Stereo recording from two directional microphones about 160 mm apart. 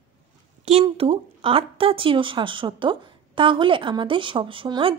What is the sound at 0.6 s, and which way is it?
Speech, 40° right (ahead or behind).